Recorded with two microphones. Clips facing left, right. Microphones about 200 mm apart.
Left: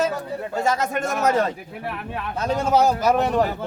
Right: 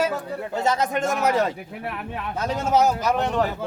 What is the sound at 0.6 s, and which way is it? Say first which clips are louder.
Speech: right 1 dB; 20° right (ahead or behind).